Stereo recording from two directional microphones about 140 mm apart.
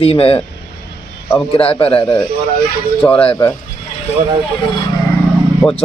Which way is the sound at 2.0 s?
15° left (ahead or behind).